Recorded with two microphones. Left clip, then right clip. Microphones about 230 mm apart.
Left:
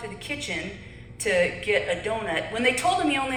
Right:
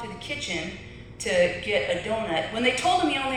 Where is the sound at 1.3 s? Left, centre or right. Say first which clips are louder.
Left 1 dB; left.